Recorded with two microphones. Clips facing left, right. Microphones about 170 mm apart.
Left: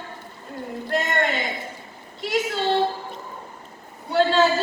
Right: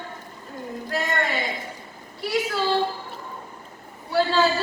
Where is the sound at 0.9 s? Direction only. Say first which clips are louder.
Left 2 dB; 25° left (ahead or behind).